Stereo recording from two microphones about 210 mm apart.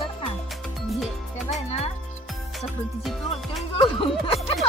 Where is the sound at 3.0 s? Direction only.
Centre (ahead or behind).